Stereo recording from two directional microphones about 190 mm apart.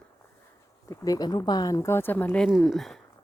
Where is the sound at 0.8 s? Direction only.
20° left (ahead or behind); by 3.0 s centre (ahead or behind).